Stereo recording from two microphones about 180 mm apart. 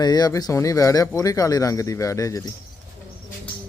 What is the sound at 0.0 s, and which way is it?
Speech, 20° left (ahead or behind).